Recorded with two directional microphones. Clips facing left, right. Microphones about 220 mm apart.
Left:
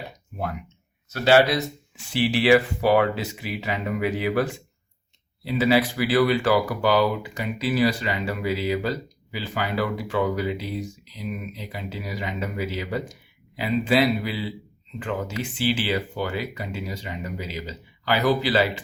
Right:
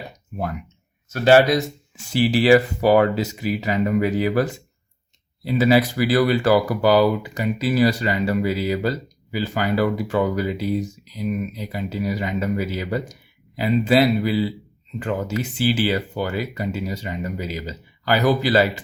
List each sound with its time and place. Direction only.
1.1 s speech: 45° right (ahead or behind)